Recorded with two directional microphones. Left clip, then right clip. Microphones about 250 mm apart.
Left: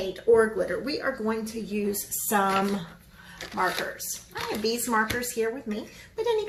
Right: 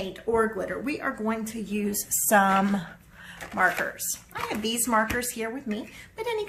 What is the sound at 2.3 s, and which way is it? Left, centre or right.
Speech, right.